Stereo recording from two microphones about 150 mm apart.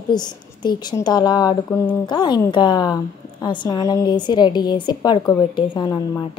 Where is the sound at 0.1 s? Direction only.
30° left (ahead or behind).